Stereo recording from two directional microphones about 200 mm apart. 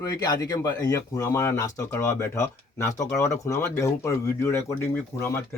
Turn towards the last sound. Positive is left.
turn(degrees=15)  # may be behind; listen again after turning